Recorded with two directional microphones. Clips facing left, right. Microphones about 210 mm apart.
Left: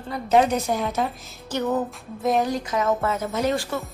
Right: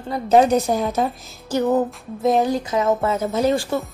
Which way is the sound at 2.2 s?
25° right (ahead or behind).